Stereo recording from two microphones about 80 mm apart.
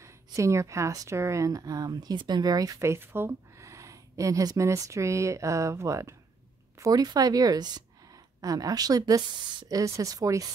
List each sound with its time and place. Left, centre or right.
0.0 s speech: right
2.8 s speech: right
6.8 s a woman's voice: right
9.7 s a woman's voice: right